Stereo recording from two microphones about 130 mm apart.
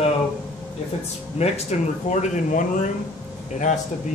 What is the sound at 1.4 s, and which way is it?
Speech, 60° left (ahead or behind).